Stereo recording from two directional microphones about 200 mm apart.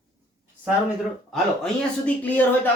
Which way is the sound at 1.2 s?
Centre (ahead or behind).